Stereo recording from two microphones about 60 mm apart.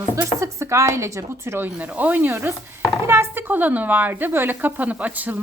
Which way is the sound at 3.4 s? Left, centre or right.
Right.